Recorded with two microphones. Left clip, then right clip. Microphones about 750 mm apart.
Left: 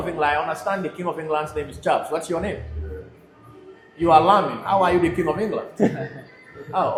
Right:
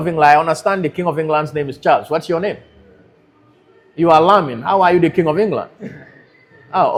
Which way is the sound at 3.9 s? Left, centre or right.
Right.